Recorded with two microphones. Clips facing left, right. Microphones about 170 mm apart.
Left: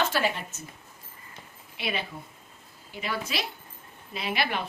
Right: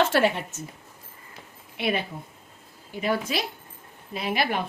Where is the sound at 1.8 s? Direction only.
50° right (ahead or behind).